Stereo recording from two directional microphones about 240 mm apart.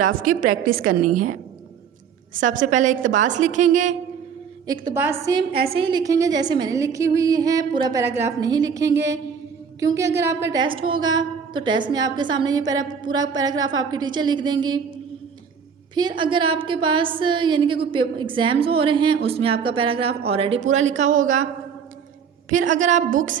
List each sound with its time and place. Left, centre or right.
0.2 s a woman's voice: right
0.8 s a woman's voice: right
2.4 s a woman's voice: right
4.6 s a woman's voice: centre
16.0 s a woman's voice: centre
22.4 s a woman's voice: right